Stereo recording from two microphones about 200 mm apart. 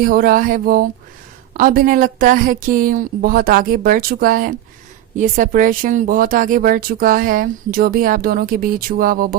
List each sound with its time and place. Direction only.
0.0 s speech: 45° right (ahead or behind)